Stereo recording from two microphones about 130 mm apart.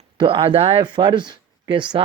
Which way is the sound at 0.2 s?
40° right (ahead or behind).